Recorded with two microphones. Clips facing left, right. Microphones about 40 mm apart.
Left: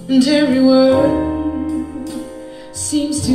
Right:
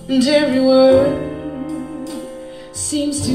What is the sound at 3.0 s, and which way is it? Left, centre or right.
Music, right.